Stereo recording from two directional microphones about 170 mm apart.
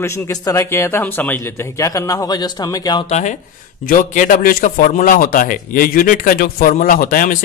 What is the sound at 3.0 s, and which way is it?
A man's voice, 45° left (ahead or behind).